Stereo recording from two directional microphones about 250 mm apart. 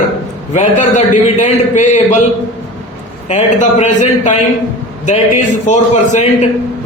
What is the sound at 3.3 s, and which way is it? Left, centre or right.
A man's voice, left.